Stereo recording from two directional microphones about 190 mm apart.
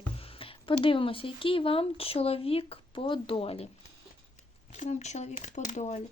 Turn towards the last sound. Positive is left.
turn(degrees=40)  # may be behind; listen again after turning